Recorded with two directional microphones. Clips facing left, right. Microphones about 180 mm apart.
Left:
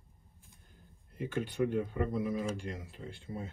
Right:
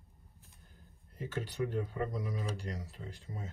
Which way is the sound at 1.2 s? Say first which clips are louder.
Left 4 dB; 40° right (ahead or behind).